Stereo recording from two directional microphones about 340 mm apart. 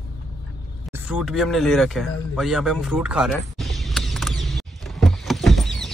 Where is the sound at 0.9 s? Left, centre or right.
Centre.